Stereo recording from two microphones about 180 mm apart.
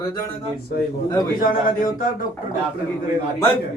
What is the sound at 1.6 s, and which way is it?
Speech, 50° left (ahead or behind).